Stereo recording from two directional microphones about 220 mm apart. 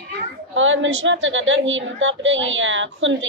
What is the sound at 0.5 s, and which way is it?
A woman's voice, 60° right (ahead or behind).